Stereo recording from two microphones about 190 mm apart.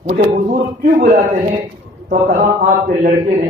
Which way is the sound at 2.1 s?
40° right (ahead or behind).